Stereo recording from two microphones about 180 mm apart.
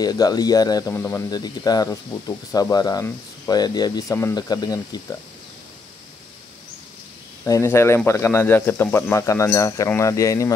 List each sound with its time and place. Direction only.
0.0 s speech: 20° left (ahead or behind)
7.4 s speech: 15° left (ahead or behind)